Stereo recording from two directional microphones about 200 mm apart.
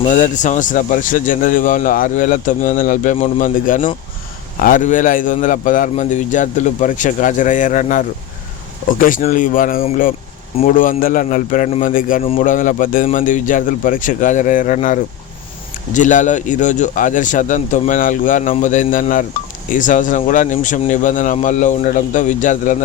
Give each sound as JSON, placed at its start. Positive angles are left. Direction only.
{"t": 0.0, "sound": "a man's voice", "side_deg": 35}
{"t": 12.2, "sound": "a man's voice", "side_deg": 30}
{"t": 12.5, "sound": "a man's voice", "side_deg": 40}